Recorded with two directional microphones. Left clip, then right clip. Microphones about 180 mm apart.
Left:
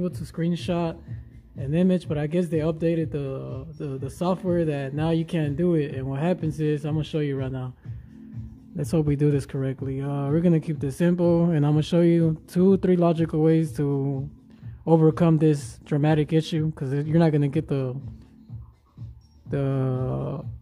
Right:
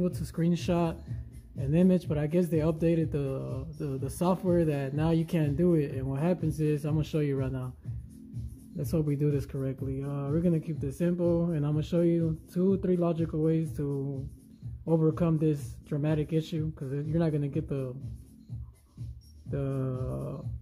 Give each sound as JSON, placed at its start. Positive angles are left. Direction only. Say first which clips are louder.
{"t": 0.0, "sound": "speech", "louder": "left 2 dB", "side_deg": 5}
{"t": 8.7, "sound": "speech", "louder": "left 6 dB", "side_deg": 20}
{"t": 19.5, "sound": "speech", "louder": "left 7 dB", "side_deg": 20}